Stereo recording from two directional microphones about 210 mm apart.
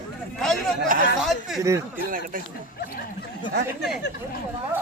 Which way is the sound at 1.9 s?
40° right (ahead or behind).